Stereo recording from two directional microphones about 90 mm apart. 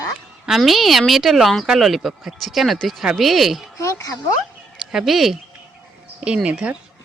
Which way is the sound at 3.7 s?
40° left (ahead or behind).